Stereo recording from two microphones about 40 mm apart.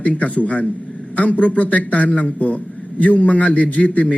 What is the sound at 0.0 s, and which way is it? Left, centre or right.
A man's voice, left.